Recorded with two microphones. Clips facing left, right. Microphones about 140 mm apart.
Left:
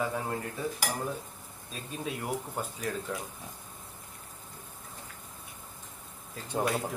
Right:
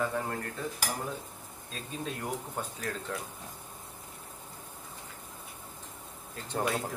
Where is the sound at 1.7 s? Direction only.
5° left (ahead or behind).